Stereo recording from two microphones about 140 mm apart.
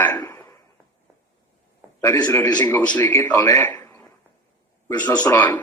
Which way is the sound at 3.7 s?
15° left (ahead or behind).